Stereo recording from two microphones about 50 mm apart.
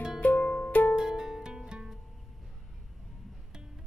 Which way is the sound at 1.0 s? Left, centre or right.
Centre.